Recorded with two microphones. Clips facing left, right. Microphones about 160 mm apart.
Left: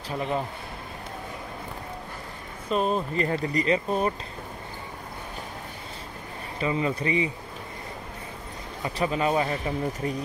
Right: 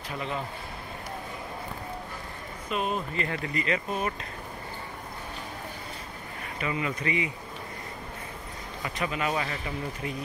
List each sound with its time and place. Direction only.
2.7 s speech: 35° left (ahead or behind)
6.6 s speech: 30° left (ahead or behind)
8.8 s speech: 35° left (ahead or behind)